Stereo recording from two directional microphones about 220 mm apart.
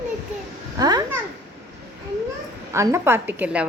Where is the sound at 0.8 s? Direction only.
15° right (ahead or behind).